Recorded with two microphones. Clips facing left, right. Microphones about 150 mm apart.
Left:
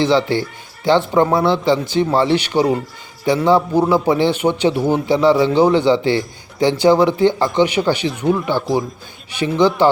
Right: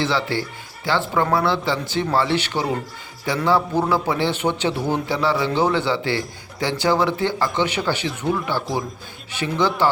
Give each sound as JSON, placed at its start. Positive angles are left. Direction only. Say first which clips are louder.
{"t": 0.0, "sound": "a man's voice", "louder": "left 7 dB", "side_deg": 20}